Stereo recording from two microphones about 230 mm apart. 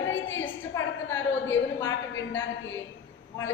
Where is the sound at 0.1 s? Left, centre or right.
Left.